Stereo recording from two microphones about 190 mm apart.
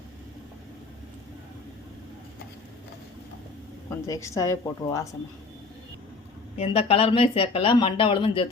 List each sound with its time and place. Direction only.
4.0 s a woman's voice: 15° left (ahead or behind)
6.6 s speech: 30° left (ahead or behind)